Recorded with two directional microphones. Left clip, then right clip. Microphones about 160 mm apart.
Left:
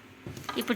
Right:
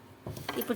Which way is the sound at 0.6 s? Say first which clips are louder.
Left 3 dB; 15° left (ahead or behind).